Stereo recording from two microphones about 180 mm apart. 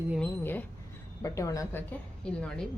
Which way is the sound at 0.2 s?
10° left (ahead or behind).